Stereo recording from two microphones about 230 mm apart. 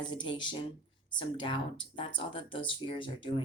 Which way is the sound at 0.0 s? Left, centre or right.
Left.